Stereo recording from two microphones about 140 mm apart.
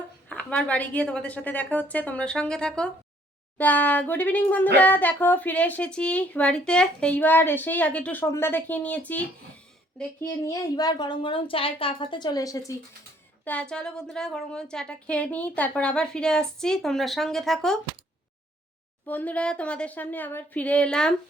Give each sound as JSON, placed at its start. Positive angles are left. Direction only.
{"t": 0.3, "sound": "speech", "side_deg": 10}
{"t": 10.2, "sound": "speech", "side_deg": 25}
{"t": 13.4, "sound": "a woman's voice", "side_deg": 10}
{"t": 19.0, "sound": "speech", "side_deg": 10}